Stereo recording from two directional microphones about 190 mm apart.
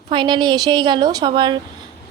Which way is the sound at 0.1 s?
25° right (ahead or behind).